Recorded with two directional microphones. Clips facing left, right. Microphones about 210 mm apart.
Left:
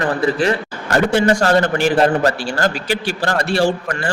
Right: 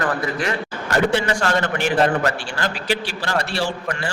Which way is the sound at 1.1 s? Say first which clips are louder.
Left 6 dB; 45° left (ahead or behind).